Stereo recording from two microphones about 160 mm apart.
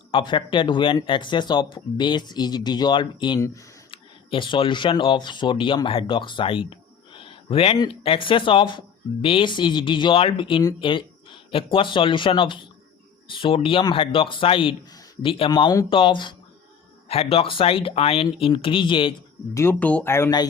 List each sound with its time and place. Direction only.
0.1 s speech: 30° left (ahead or behind)
3.9 s speech: 30° left (ahead or behind)
19.5 s speech: 10° left (ahead or behind)